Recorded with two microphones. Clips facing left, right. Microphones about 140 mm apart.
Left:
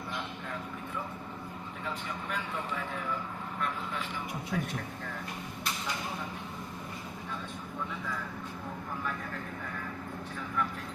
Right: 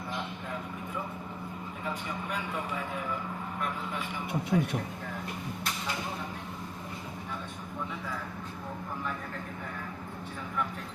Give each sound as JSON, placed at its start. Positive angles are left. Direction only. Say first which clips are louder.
{"t": 4.5, "sound": "speech", "louder": "right 6 dB", "side_deg": -20}